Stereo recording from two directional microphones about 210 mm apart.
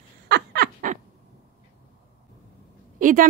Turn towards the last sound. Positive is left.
turn(degrees=-40)  # may be behind; listen again after turning